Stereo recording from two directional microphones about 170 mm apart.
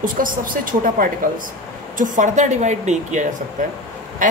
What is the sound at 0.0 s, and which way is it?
A woman's voice, 55° right (ahead or behind).